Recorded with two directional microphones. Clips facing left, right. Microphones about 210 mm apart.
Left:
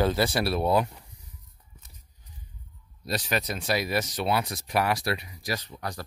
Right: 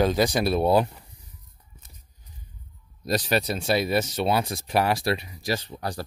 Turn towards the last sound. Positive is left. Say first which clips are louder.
# right 4 dB
turn(degrees=-30)  # may be behind; listen again after turning